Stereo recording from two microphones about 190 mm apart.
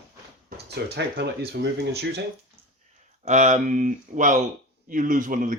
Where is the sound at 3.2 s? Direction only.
35° right (ahead or behind).